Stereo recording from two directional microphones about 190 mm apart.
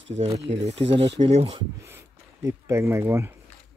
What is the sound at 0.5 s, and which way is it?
Speech, 30° right (ahead or behind).